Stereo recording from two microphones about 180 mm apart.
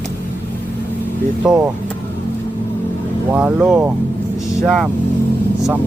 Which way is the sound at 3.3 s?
10° right (ahead or behind).